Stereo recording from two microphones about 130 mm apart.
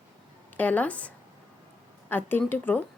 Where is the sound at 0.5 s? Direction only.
10° left (ahead or behind).